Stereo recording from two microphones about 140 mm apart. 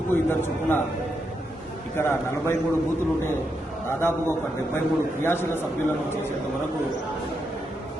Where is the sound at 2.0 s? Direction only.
20° left (ahead or behind).